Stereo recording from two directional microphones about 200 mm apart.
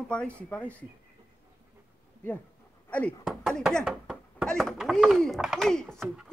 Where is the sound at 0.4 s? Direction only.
5° left (ahead or behind).